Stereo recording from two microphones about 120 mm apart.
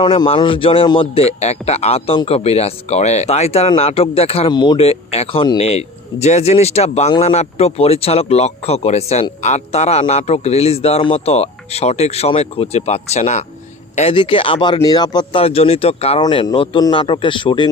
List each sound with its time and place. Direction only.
0.0 s speech: 45° left (ahead or behind)
4.5 s speech: 40° left (ahead or behind)
4.8 s speech: 55° left (ahead or behind)
14.1 s a man's voice: 45° left (ahead or behind)
15.4 s speech: 55° left (ahead or behind)
16.3 s a man's voice: 45° left (ahead or behind)